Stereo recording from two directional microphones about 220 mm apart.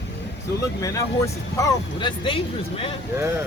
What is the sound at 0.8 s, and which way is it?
Speech, 15° left (ahead or behind).